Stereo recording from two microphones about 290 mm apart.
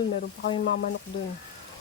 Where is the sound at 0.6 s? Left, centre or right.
Left.